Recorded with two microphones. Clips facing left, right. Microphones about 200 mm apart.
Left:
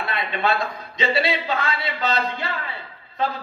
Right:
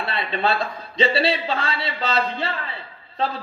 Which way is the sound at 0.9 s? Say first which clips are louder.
Right 2 dB; 30° right (ahead or behind).